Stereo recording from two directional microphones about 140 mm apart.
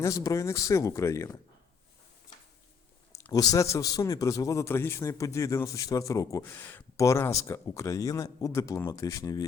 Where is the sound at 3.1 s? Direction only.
25° left (ahead or behind).